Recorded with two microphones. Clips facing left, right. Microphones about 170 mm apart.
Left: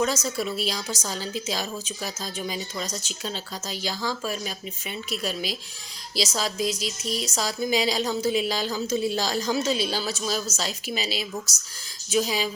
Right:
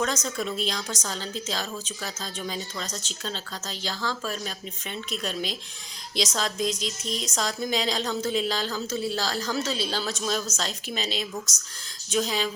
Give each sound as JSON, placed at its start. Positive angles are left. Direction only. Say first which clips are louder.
{"t": 0.0, "sound": "a woman's voice", "louder": "left 3 dB", "side_deg": 5}